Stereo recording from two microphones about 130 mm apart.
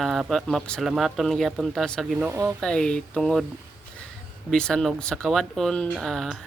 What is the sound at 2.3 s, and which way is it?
Speech, 20° right (ahead or behind).